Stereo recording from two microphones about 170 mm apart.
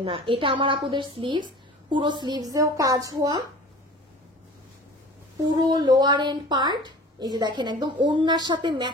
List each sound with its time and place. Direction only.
0.0 s a woman's voice: 30° right (ahead or behind)
5.6 s a woman's voice: 25° right (ahead or behind)